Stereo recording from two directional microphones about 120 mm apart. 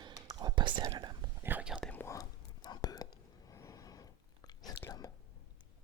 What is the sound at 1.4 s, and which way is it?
Whispering, 15° right (ahead or behind).